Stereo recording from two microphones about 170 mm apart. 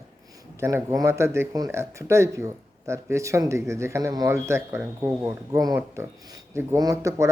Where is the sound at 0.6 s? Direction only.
15° right (ahead or behind).